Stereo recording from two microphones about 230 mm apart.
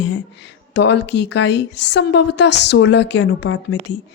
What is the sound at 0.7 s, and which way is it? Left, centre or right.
A woman's voice, left.